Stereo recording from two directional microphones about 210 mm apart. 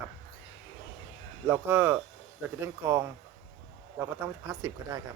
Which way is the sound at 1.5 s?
10° right (ahead or behind).